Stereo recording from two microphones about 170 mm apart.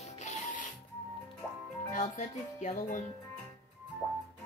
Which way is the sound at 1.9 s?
45° left (ahead or behind).